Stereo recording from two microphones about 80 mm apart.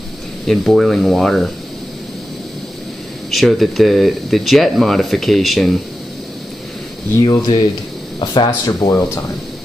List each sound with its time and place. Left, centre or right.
0.5 s speech: centre
3.3 s speech: centre
7.2 s speech: left
8.2 s speech: left